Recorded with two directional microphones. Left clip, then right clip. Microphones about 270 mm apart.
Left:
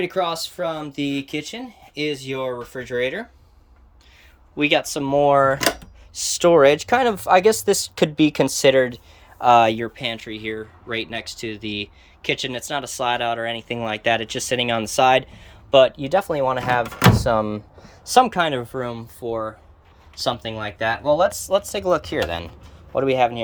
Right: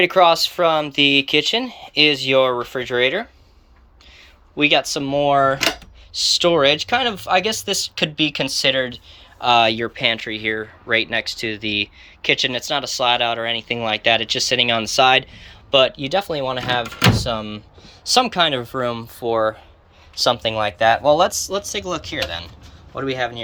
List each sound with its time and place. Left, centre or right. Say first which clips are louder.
0.0 s speech: right 9 dB; centre
4.5 s speech: right 3 dB; centre
21.4 s speech: left 4 dB; centre; by 23.4 s left